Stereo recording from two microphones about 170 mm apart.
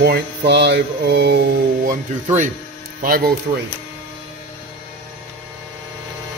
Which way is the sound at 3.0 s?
60° right (ahead or behind).